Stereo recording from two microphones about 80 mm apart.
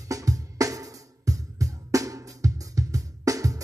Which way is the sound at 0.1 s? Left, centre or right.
Right.